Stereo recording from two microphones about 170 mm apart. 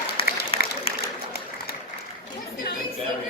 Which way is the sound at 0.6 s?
65° left (ahead or behind).